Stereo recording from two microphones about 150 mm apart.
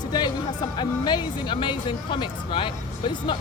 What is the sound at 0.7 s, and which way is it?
Speech, 30° left (ahead or behind).